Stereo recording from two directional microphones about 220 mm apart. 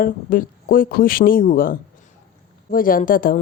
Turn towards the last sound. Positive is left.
turn(degrees=40)  # may be behind; listen again after turning